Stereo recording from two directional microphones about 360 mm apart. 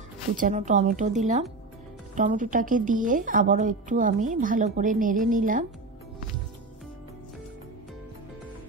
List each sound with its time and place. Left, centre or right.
0.4 s a woman's voice: right